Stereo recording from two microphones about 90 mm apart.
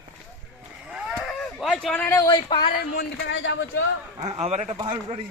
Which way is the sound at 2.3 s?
60° left (ahead or behind).